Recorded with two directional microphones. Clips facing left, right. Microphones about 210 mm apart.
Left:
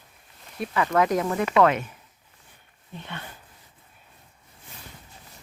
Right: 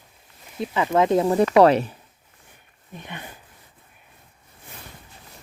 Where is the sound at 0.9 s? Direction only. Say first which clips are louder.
Right 6 dB; 25° right (ahead or behind).